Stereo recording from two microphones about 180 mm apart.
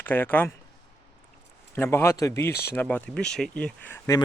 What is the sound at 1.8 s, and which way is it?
Speech, 15° left (ahead or behind).